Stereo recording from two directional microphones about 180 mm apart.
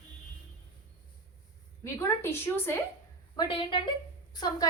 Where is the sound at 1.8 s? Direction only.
15° left (ahead or behind).